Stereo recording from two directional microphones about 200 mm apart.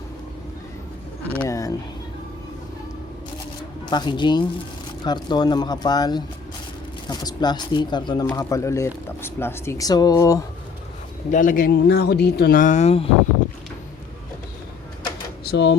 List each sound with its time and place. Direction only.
1.4 s a sound: 15° left (ahead or behind)
3.8 s speech: 20° left (ahead or behind)
11.3 s speech: 40° left (ahead or behind)
15.4 s speech: 60° left (ahead or behind)